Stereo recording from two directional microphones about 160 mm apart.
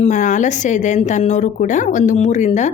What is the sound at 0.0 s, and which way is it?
A woman's voice, 50° left (ahead or behind).